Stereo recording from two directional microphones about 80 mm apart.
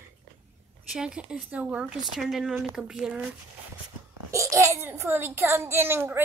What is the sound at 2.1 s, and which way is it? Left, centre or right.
Speech, centre.